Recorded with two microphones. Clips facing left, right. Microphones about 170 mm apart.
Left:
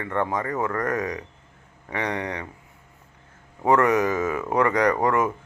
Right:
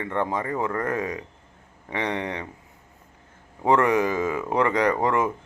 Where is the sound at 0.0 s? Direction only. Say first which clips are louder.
Left 1 dB; 25° right (ahead or behind).